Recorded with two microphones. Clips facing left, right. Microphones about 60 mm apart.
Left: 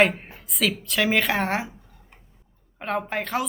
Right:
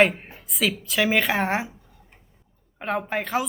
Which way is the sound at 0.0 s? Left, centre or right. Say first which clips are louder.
Right 1 dB; centre.